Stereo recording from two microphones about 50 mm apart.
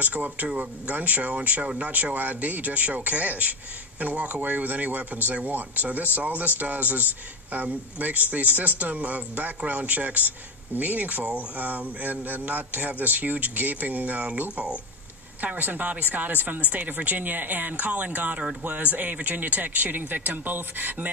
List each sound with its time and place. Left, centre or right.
0.0 s speech: right